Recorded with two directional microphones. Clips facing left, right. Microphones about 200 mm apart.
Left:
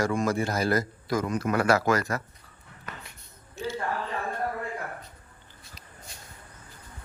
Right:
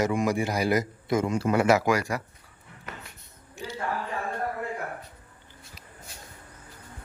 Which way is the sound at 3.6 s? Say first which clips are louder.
Left 5 dB; 15° right (ahead or behind).